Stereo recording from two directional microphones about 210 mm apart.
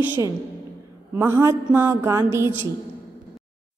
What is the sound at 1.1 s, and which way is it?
A woman's voice, 10° right (ahead or behind).